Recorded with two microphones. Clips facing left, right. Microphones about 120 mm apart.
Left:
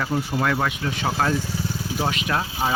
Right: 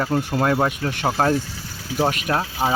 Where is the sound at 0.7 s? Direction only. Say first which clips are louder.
Right 2 dB; 50° right (ahead or behind).